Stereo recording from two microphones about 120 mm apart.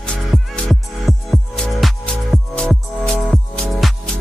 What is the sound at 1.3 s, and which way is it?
Music, centre (ahead or behind).